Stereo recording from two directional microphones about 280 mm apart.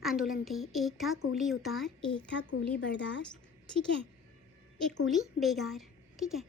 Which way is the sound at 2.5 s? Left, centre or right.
Left.